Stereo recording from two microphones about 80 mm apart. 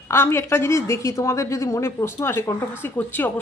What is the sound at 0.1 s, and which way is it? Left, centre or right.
A woman's voice, left.